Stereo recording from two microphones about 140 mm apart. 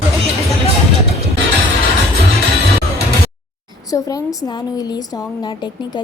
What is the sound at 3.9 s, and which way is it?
A woman's voice, 25° left (ahead or behind).